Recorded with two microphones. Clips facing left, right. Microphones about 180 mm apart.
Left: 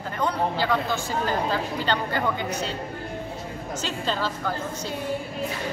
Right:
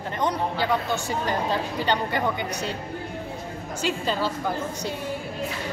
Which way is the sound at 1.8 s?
15° right (ahead or behind).